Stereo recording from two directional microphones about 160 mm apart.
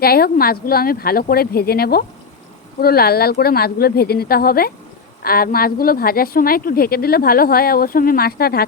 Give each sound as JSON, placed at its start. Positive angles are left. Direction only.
{"t": 0.0, "sound": "a woman's voice", "side_deg": 75}